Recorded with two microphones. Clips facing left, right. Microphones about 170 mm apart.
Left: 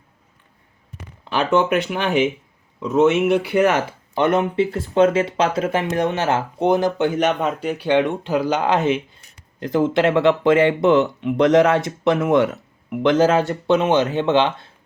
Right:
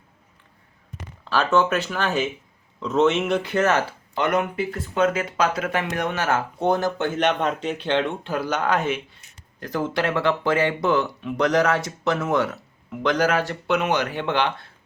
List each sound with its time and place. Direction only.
1.2 s speech: 15° left (ahead or behind)
7.2 s speech: 5° left (ahead or behind)
8.6 s speech: 25° left (ahead or behind)